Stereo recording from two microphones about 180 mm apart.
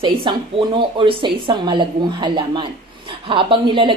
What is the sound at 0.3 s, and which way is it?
A woman's voice, 25° right (ahead or behind).